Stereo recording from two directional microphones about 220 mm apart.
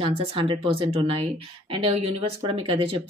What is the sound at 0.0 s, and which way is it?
Speech, 25° right (ahead or behind).